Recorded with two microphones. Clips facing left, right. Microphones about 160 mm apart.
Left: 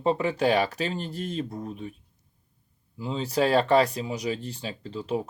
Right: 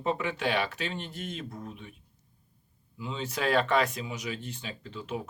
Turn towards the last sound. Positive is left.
turn(degrees=35)  # may be behind; listen again after turning